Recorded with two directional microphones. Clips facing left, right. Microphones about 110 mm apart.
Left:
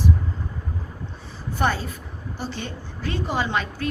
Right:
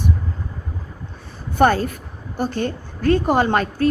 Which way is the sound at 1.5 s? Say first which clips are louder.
Right 8 dB; 50° right (ahead or behind).